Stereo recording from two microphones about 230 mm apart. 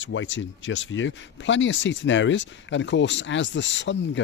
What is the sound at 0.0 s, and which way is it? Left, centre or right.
Speech, left.